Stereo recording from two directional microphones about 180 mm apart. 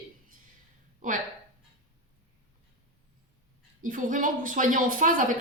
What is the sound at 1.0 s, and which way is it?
Speech, 45° right (ahead or behind).